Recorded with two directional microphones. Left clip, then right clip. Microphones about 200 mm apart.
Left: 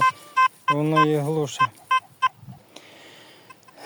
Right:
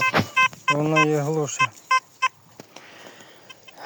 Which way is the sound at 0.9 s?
5° left (ahead or behind).